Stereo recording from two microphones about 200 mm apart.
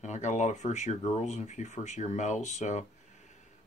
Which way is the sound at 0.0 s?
35° left (ahead or behind).